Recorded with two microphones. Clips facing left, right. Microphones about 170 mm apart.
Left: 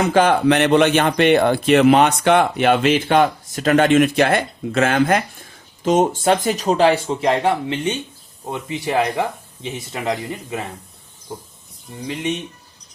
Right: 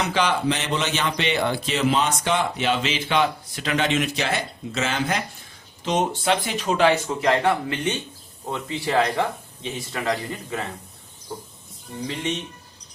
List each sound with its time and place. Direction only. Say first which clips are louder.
0.0 s speech: left 7 dB; 50° left (ahead or behind); by 10.7 s 15° left (ahead or behind)
11.9 s speech: left 3 dB; 15° left (ahead or behind)